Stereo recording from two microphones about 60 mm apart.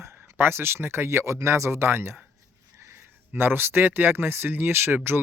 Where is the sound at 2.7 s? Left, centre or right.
Right.